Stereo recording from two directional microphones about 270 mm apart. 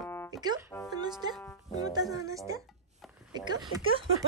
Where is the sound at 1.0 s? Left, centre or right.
Centre.